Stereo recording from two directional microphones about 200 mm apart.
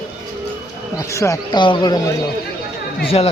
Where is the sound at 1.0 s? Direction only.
15° left (ahead or behind).